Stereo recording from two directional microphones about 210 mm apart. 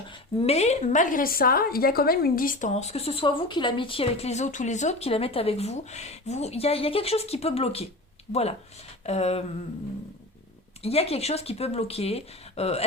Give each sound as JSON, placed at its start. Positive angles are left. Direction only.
{"t": 0.3, "sound": "a woman's voice", "side_deg": 30}
{"t": 9.0, "sound": "a sound", "side_deg": 30}
{"t": 10.8, "sound": "a woman's voice", "side_deg": 30}